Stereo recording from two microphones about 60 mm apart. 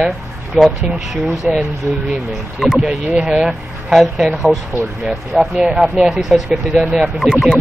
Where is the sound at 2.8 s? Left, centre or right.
Centre.